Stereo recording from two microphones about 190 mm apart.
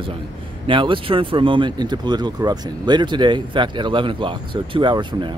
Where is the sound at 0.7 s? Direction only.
25° right (ahead or behind).